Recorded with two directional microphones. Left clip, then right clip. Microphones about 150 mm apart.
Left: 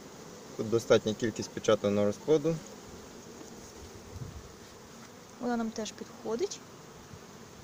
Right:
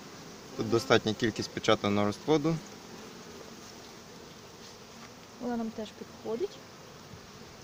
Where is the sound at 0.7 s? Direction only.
45° right (ahead or behind).